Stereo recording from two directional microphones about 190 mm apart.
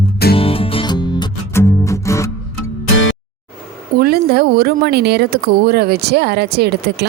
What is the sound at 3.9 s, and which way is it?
Speech, 55° right (ahead or behind).